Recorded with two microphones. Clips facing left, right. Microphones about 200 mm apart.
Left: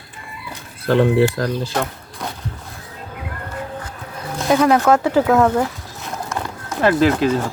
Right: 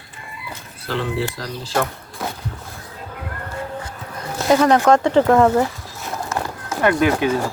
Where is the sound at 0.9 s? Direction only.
55° left (ahead or behind).